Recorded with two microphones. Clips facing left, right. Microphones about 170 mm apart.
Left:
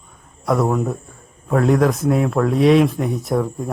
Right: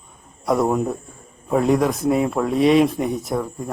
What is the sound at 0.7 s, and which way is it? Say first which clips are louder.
Speech: even; 15° right (ahead or behind).